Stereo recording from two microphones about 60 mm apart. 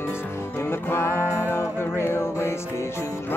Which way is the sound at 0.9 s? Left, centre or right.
Left.